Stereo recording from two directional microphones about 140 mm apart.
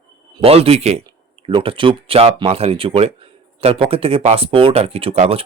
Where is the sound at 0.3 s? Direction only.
45° right (ahead or behind).